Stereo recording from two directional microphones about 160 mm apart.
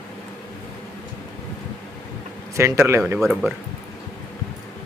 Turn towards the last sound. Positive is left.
turn(degrees=0)  # may be behind; listen again after turning